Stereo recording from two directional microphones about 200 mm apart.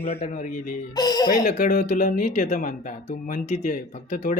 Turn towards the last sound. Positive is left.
turn(degrees=40)  # may be behind; listen again after turning